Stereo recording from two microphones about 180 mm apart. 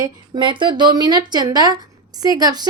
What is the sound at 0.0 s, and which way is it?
A woman's voice, 25° right (ahead or behind).